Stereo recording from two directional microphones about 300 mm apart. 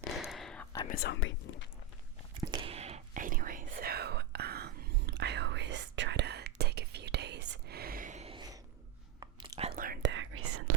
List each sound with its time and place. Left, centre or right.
0.2 s whispering: centre
0.9 s whispering: left
2.3 s whispering: centre; by 7.4 s right
7.7 s a sound: right
9.2 s whispering: centre; by 10.6 s right